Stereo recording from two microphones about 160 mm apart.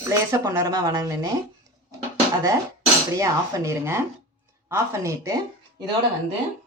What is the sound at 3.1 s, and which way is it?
A man's voice, 20° right (ahead or behind).